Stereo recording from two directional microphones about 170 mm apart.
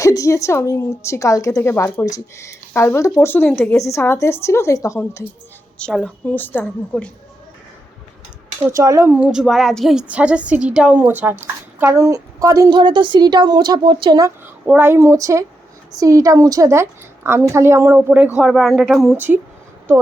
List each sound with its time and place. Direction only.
0.0 s a woman's voice: 20° left (ahead or behind)
5.8 s a woman's voice: 5° left (ahead or behind)
8.6 s a woman's voice: 20° right (ahead or behind)
18.3 s speech: centre (ahead or behind)
19.1 s a woman's voice: 10° right (ahead or behind)